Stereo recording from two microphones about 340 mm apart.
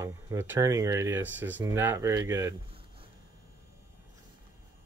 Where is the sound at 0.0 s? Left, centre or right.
Centre.